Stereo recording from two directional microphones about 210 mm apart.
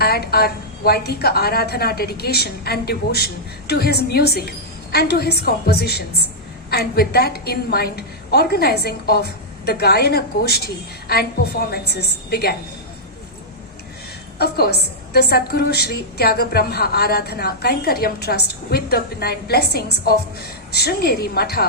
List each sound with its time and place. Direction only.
0.0 s a woman's voice: 50° left (ahead or behind)
14.3 s a woman's voice: 50° left (ahead or behind)